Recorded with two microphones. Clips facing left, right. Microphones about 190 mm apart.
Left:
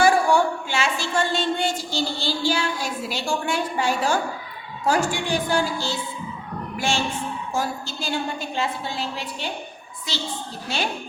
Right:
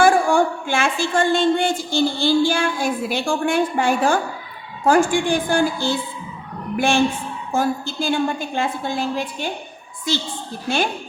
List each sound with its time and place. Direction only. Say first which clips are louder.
0.0 s a woman's voice: right 3 dB; 50° right (ahead or behind)